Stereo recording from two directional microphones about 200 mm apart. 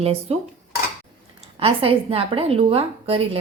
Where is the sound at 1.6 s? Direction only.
30° right (ahead or behind).